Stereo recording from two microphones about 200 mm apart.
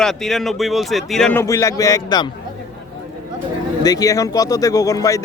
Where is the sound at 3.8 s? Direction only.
20° left (ahead or behind).